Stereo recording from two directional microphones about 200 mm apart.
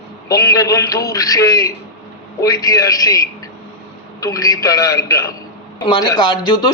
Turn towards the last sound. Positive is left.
turn(degrees=20)  # may be behind; listen again after turning